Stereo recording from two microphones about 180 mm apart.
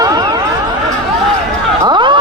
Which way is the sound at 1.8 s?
25° right (ahead or behind).